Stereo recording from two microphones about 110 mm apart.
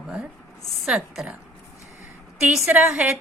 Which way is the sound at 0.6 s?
Centre (ahead or behind).